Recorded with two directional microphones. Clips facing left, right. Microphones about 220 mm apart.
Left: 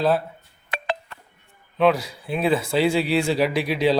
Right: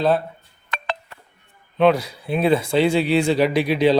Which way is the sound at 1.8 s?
Centre (ahead or behind).